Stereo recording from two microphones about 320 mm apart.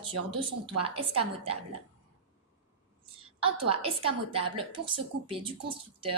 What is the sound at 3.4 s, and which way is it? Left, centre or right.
A woman's voice, centre.